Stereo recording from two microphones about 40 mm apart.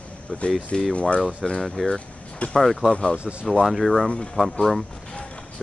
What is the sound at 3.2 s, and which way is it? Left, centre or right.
Speech, right.